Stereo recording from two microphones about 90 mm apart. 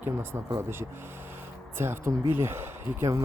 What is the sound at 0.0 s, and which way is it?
Speech, 25° right (ahead or behind).